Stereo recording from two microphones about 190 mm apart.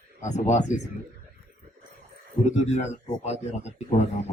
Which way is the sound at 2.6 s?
35° left (ahead or behind).